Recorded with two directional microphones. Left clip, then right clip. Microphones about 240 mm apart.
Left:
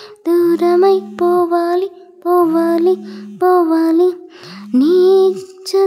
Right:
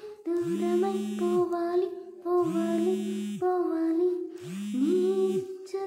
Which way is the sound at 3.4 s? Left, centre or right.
Left.